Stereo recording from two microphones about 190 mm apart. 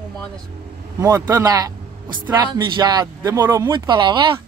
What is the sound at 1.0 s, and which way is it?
Speech, 15° right (ahead or behind).